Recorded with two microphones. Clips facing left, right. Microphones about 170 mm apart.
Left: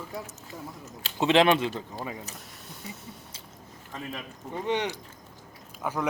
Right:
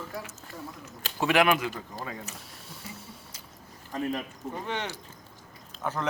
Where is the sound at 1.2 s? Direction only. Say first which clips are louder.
Left 3 dB; 25° left (ahead or behind).